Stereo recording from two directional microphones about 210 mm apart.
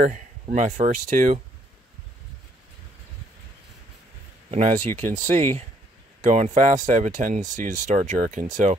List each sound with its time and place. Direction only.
0.0 s speech: 40° right (ahead or behind)
4.5 s speech: 35° right (ahead or behind)